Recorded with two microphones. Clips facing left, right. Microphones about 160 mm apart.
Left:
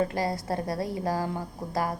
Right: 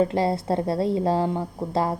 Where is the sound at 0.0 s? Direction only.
25° right (ahead or behind).